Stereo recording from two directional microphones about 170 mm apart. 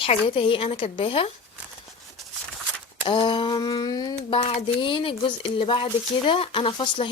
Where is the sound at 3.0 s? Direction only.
30° left (ahead or behind).